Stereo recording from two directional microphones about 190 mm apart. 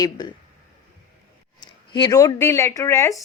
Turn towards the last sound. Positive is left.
turn(degrees=15)  # may be behind; listen again after turning